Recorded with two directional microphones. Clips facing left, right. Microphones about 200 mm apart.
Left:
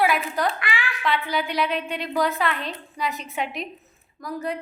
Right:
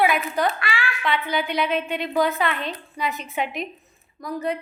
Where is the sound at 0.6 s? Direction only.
15° left (ahead or behind).